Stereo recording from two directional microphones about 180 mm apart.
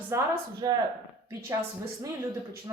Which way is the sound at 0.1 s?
15° right (ahead or behind).